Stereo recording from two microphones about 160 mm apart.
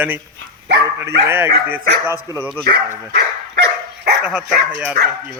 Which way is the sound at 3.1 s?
80° right.